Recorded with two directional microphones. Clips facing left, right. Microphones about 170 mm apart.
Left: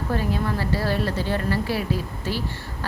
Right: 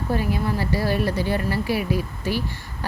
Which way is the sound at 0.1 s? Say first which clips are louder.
Right 1 dB; 10° right (ahead or behind).